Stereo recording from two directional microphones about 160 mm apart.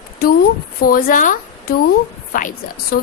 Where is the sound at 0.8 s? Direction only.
65° left (ahead or behind).